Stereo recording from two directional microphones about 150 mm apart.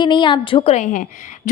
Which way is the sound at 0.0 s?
30° left (ahead or behind).